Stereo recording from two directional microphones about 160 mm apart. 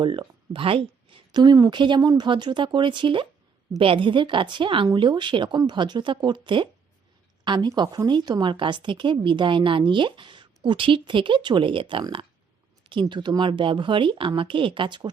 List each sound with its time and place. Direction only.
0.0 s a woman's voice: 30° right (ahead or behind)